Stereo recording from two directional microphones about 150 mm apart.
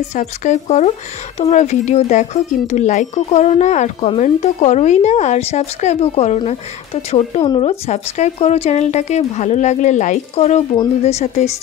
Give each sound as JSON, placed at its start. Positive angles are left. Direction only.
{"t": 0.1, "sound": "speech", "side_deg": 50}